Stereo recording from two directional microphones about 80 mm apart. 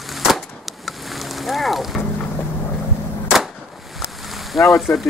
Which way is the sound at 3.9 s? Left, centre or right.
Centre.